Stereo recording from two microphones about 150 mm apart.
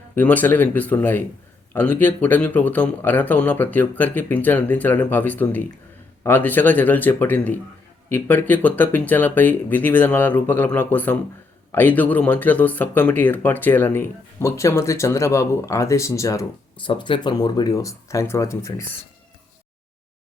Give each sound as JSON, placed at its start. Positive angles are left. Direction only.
{"t": 0.2, "sound": "speech", "side_deg": 10}
{"t": 16.8, "sound": "speech", "side_deg": 35}